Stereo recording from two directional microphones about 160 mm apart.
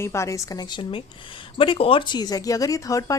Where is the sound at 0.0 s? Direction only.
15° left (ahead or behind).